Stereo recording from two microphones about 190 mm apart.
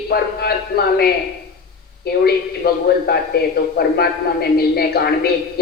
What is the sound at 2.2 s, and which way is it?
A man's voice, 55° left (ahead or behind).